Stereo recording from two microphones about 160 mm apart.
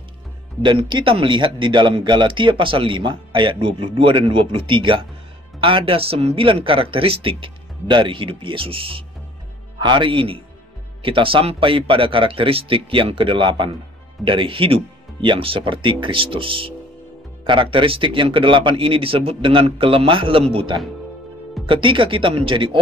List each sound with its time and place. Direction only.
0.6 s speech: 30° right (ahead or behind)